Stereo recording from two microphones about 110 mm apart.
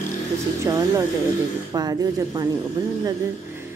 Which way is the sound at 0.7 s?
25° right (ahead or behind).